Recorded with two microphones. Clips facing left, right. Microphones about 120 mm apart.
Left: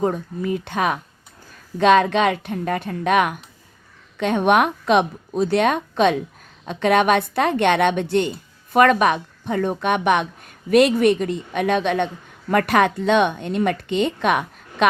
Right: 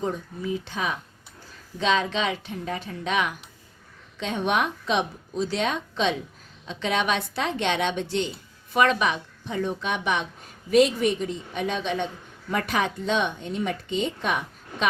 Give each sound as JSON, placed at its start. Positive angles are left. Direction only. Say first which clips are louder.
{"t": 0.0, "sound": "a woman's voice", "louder": "left 7 dB", "side_deg": 55}